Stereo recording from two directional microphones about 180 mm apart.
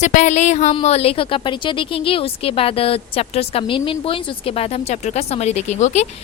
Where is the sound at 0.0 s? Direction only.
40° left (ahead or behind).